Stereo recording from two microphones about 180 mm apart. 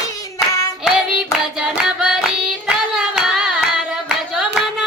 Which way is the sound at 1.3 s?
5° right (ahead or behind).